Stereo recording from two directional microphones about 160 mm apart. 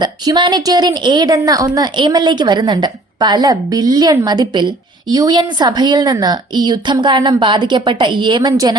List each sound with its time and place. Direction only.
0.0 s a woman's voice: 30° right (ahead or behind)